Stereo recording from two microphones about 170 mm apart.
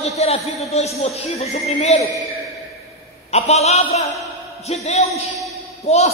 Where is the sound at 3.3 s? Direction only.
40° left (ahead or behind).